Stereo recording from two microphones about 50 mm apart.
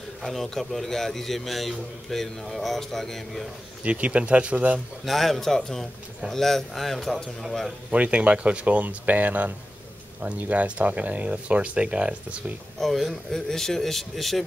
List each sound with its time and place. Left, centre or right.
0.3 s a man's voice: centre
3.8 s speech: right
5.0 s a man's voice: centre
7.9 s speech: right
12.7 s a man's voice: centre